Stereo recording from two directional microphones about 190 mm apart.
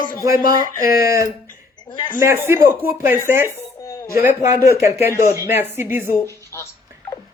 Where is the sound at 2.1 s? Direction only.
10° right (ahead or behind).